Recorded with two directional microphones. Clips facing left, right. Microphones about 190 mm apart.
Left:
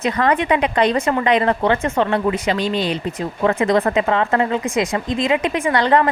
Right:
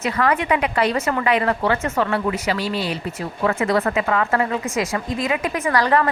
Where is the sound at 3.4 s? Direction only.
35° left (ahead or behind).